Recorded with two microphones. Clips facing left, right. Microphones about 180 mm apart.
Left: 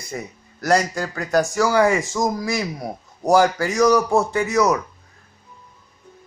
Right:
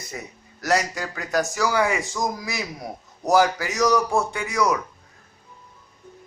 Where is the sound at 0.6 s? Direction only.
50° left (ahead or behind).